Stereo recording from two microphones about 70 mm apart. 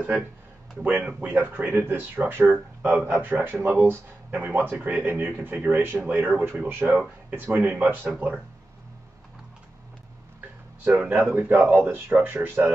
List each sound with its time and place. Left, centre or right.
0.8 s speech: centre
10.8 s speech: right
12.6 s speech: centre